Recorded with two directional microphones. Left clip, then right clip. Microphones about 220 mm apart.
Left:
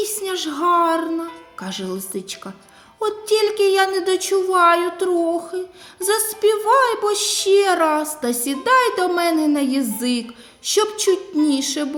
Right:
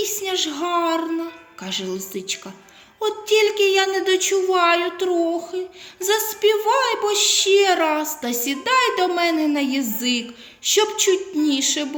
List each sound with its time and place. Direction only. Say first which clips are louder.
0.0 s speech: right 1 dB; 40° left (ahead or behind)